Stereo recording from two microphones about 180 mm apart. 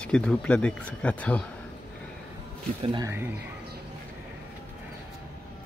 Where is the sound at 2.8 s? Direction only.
25° right (ahead or behind).